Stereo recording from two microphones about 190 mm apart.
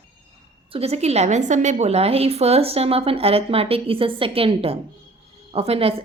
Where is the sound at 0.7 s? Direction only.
35° right (ahead or behind).